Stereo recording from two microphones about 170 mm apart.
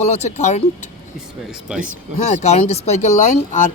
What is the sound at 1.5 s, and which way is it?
Speech, 5° right (ahead or behind).